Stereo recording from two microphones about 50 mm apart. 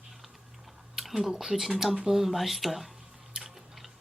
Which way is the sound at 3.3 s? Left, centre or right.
Centre.